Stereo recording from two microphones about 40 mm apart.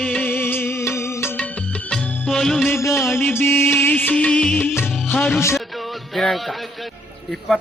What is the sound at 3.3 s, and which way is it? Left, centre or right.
Mantra, left.